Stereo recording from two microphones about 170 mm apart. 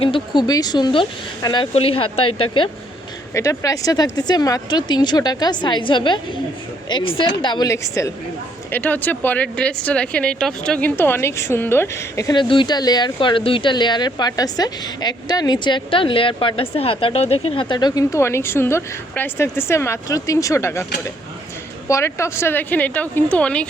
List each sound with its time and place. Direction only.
0.0 s speech: 30° left (ahead or behind)
3.3 s speech: 20° left (ahead or behind)
21.8 s a woman's voice: 15° left (ahead or behind)